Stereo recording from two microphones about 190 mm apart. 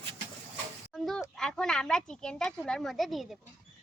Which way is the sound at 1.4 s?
5° left (ahead or behind).